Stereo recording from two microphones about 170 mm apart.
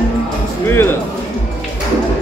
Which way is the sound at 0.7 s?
15° left (ahead or behind).